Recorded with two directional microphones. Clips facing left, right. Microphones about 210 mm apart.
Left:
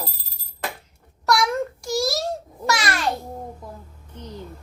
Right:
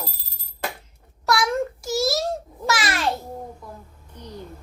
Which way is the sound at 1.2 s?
Centre (ahead or behind).